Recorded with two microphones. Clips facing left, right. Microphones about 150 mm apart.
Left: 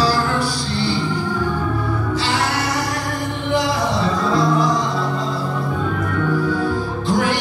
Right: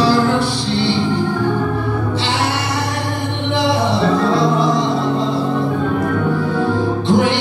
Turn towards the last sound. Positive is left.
turn(degrees=-25)  # may be behind; listen again after turning